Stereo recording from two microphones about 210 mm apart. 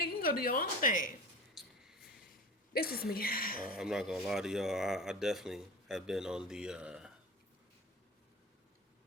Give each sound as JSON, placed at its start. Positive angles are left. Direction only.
{"t": 0.0, "sound": "a woman's voice", "side_deg": 45}
{"t": 1.6, "sound": "mouse", "side_deg": 0}
{"t": 2.7, "sound": "a woman's voice", "side_deg": 45}
{"t": 3.7, "sound": "speech", "side_deg": 0}